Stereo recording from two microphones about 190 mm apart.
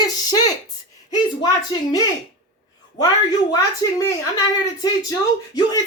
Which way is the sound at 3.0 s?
20° left (ahead or behind).